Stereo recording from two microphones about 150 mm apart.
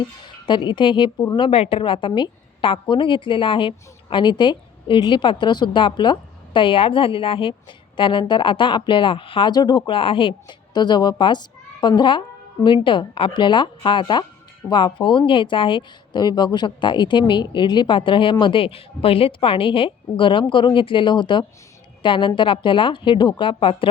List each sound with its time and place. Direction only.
0.4 s a woman's voice: 30° left (ahead or behind)